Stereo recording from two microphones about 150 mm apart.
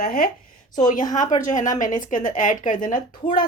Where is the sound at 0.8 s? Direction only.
60° left (ahead or behind).